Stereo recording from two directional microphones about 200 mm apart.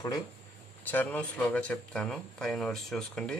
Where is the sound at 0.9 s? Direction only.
10° left (ahead or behind).